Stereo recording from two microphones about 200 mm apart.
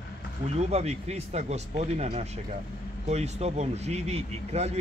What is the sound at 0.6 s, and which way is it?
Speech, 35° right (ahead or behind).